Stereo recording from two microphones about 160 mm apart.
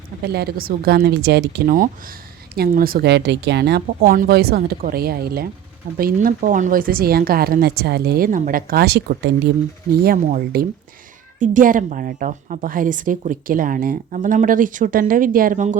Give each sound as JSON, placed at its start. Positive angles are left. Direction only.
{"t": 0.3, "sound": "a woman's voice", "side_deg": -80}
{"t": 3.8, "sound": "a woman's voice", "side_deg": -65}
{"t": 10.0, "sound": "a woman's voice", "side_deg": -60}